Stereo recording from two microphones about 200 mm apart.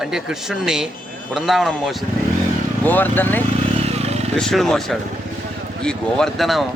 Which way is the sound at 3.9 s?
30° right (ahead or behind).